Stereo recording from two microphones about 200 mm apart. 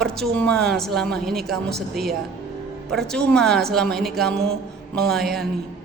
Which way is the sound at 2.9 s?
Centre (ahead or behind).